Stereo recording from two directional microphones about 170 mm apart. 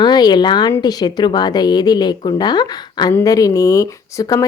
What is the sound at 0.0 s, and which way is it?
A woman's voice, 25° left (ahead or behind).